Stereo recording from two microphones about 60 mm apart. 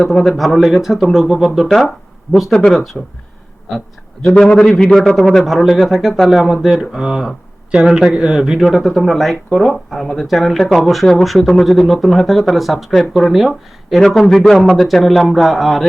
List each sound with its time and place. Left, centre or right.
0.3 s speech: centre
2.5 s a man's voice: centre
3.0 s speech: centre
4.2 s a man's voice: centre